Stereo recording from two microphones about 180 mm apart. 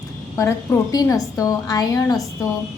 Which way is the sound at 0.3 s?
15° left (ahead or behind).